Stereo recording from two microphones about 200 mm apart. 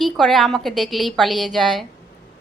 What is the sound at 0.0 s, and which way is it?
A woman's voice, centre (ahead or behind).